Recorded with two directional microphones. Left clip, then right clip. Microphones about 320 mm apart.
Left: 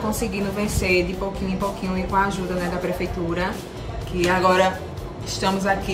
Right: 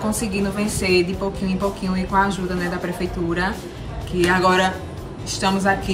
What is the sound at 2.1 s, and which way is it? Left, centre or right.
Speech, centre.